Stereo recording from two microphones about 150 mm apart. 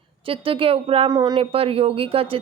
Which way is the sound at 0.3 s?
35° right (ahead or behind).